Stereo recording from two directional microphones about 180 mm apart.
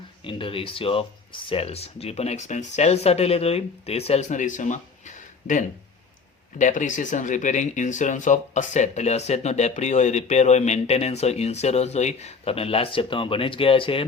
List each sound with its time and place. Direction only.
0.3 s speech: 30° left (ahead or behind)